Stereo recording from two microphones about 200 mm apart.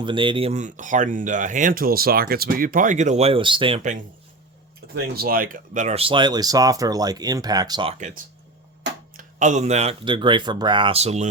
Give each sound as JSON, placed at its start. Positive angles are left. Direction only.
{"t": 0.0, "sound": "speech", "side_deg": -25}
{"t": 4.9, "sound": "speech", "side_deg": -55}
{"t": 7.9, "sound": "speech", "side_deg": -40}